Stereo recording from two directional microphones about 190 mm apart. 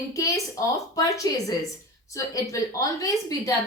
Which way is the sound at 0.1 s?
15° left (ahead or behind).